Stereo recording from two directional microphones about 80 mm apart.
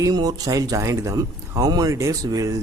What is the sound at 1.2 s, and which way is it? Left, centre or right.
Speech, right.